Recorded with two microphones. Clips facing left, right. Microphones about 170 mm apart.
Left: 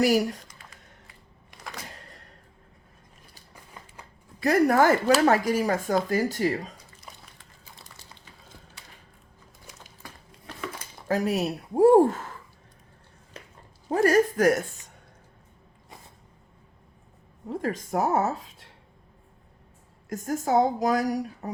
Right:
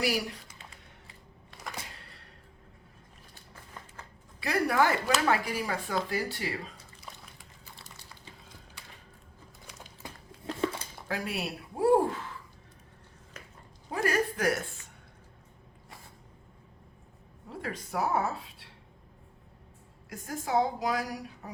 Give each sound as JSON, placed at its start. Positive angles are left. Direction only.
{"t": 0.0, "sound": "speech", "side_deg": 45}
{"t": 0.6, "sound": "music", "side_deg": -25}
{"t": 2.0, "sound": "a sound", "side_deg": 45}
{"t": 4.4, "sound": "speech", "side_deg": 45}
{"t": 10.0, "sound": "a sound", "side_deg": -30}
{"t": 11.1, "sound": "speech", "side_deg": 40}
{"t": 13.9, "sound": "speech", "side_deg": 40}
{"t": 17.5, "sound": "speech", "side_deg": 45}
{"t": 20.1, "sound": "speech", "side_deg": 45}